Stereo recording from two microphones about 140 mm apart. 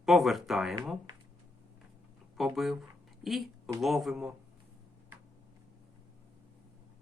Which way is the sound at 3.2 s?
Centre (ahead or behind).